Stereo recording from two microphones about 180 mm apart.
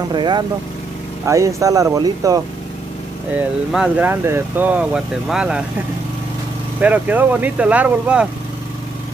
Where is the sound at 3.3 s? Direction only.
5° right (ahead or behind).